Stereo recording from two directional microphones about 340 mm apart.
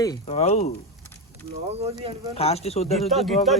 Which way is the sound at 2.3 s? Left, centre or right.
Centre.